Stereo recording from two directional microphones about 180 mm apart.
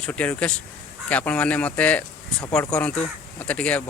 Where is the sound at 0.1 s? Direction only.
5° left (ahead or behind).